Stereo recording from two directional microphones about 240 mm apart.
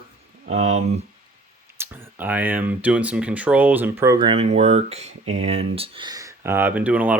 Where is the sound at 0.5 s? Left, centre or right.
Right.